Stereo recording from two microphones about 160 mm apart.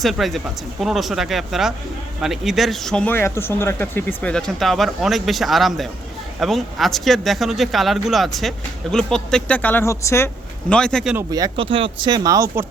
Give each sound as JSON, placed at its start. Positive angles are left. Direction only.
{"t": 0.0, "sound": "speech", "side_deg": 0}
{"t": 10.7, "sound": "speech", "side_deg": 5}
{"t": 11.3, "sound": "speech", "side_deg": -25}
{"t": 11.6, "sound": "speech", "side_deg": -35}